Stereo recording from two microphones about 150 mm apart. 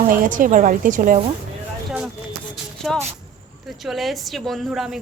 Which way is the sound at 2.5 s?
5° left (ahead or behind).